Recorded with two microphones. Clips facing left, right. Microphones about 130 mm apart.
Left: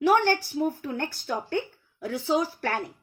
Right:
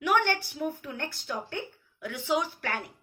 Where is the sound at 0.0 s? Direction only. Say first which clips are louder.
Left 5 dB; 35° left (ahead or behind).